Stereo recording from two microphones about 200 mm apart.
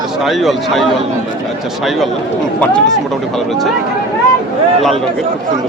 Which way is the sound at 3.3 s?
Centre (ahead or behind).